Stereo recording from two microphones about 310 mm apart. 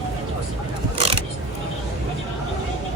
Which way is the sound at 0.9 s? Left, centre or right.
Centre.